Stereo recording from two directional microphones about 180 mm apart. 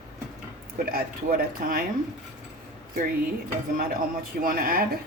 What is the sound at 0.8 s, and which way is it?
Speech, 55° right (ahead or behind).